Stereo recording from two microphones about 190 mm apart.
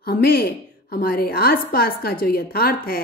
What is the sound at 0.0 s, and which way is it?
A woman's voice, 50° left (ahead or behind).